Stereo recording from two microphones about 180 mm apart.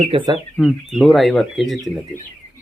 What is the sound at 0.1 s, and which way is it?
Speech, 25° right (ahead or behind).